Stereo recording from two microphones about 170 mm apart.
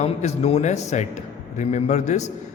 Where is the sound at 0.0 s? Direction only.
40° left (ahead or behind).